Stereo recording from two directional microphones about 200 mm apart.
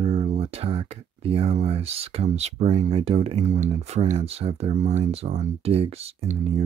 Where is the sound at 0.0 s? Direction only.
35° right (ahead or behind).